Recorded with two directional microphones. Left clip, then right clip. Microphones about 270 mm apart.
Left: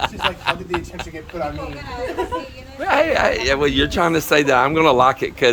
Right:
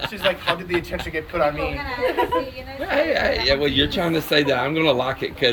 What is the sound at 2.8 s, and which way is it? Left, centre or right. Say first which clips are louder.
Speech: left 4 dB; centre.